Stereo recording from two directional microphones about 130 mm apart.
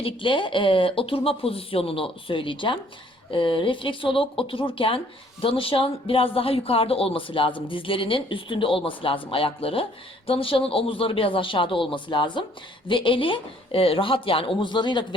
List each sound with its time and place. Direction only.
0.0 s speech: 40° left (ahead or behind)